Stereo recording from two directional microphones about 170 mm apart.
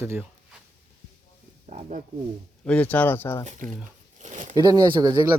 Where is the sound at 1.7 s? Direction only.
45° right (ahead or behind).